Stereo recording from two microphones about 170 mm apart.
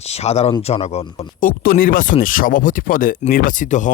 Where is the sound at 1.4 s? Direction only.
55° left (ahead or behind).